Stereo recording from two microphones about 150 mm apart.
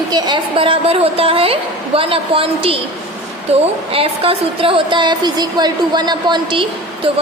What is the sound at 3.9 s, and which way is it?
A woman's voice, 40° right (ahead or behind).